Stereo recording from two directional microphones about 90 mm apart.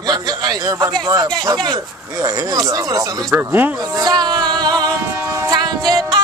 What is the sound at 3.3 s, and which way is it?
Speech, 20° right (ahead or behind).